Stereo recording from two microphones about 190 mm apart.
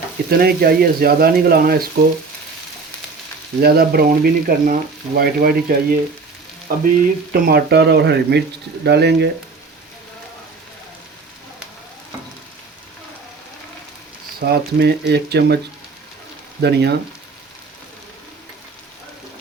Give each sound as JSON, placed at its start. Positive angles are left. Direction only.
{"t": 0.3, "sound": "speech", "side_deg": -55}
{"t": 3.6, "sound": "speech", "side_deg": -55}
{"t": 14.3, "sound": "speech", "side_deg": -55}
{"t": 16.6, "sound": "speech", "side_deg": -60}